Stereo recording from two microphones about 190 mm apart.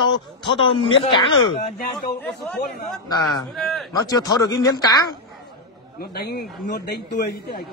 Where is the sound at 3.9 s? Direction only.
20° left (ahead or behind).